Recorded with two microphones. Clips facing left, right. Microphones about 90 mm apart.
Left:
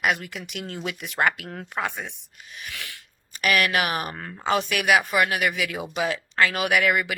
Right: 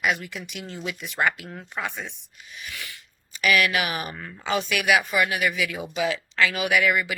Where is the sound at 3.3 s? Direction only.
45° left (ahead or behind).